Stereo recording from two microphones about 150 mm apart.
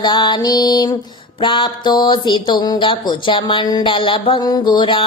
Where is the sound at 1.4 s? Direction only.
30° left (ahead or behind).